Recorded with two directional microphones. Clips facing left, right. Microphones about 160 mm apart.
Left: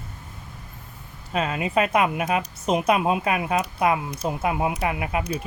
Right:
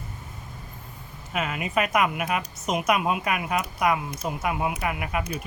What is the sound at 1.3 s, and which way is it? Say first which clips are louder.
Speech: left 4 dB; 30° left (ahead or behind).